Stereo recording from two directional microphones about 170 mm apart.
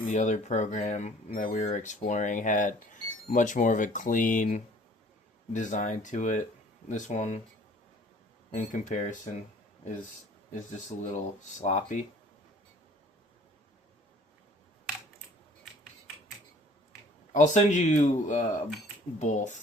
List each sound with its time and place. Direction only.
0.0 s speech: 45° left (ahead or behind)
8.5 s speech: 45° left (ahead or behind)
11.0 s speech: 45° left (ahead or behind)
17.3 s speech: 45° left (ahead or behind)